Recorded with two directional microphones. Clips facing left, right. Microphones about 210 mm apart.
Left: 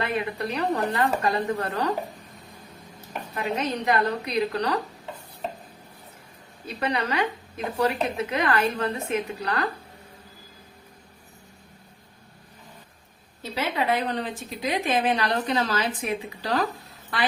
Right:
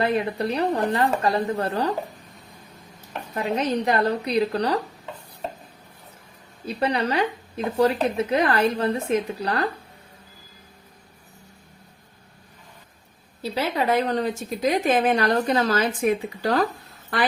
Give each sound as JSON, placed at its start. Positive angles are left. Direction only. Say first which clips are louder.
{"t": 0.0, "sound": "speech", "louder": "right 5 dB", "side_deg": -35}
{"t": 3.3, "sound": "speech", "louder": "right 4 dB", "side_deg": -35}
{"t": 6.7, "sound": "speech", "louder": "right 4 dB", "side_deg": -30}
{"t": 13.4, "sound": "a woman's voice", "louder": "right 3 dB", "side_deg": -35}